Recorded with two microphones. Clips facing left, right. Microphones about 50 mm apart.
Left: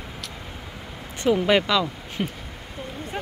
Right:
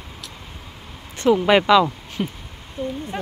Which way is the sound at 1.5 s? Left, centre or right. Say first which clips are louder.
Right 8 dB; right.